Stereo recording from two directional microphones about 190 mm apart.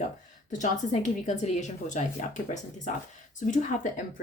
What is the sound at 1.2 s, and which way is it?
A woman's voice, 40° left (ahead or behind).